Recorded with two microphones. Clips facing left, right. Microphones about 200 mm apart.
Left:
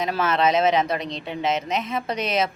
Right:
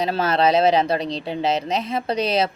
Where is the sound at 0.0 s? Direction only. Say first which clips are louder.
Right 2 dB; 35° right (ahead or behind).